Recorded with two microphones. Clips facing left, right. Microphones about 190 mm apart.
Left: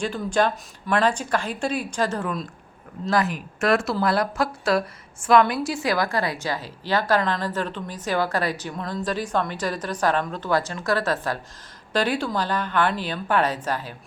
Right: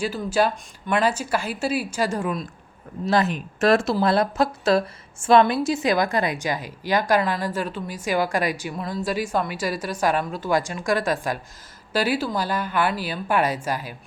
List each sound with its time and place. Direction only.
0.0 s a woman's voice: 5° right (ahead or behind)
3.1 s a woman's voice: 25° right (ahead or behind)